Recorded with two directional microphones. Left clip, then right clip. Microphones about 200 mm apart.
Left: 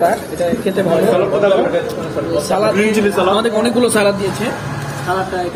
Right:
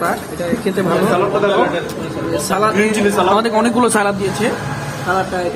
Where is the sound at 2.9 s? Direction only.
10° left (ahead or behind).